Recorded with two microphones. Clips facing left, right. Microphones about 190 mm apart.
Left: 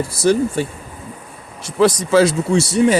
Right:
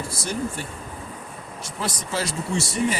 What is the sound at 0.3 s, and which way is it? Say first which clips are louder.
Speech: left 15 dB; 85° left.